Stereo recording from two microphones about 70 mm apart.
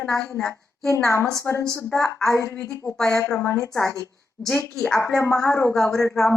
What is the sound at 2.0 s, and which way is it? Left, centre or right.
Speech, centre.